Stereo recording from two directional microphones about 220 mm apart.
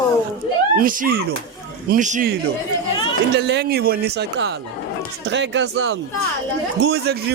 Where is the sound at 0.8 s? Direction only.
40° right (ahead or behind).